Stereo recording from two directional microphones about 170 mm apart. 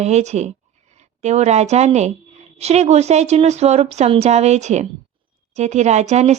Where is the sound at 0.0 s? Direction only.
40° right (ahead or behind).